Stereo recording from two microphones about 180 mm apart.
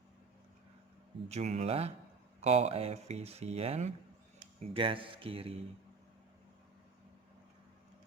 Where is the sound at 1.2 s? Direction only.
35° right (ahead or behind).